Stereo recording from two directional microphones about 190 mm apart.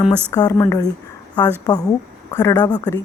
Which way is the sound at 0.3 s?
20° left (ahead or behind).